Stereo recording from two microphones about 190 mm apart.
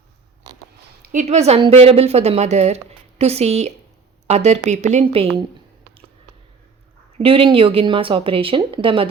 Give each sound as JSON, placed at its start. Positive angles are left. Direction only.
{"t": 1.1, "sound": "a woman's voice", "side_deg": -40}
{"t": 7.2, "sound": "speech", "side_deg": -30}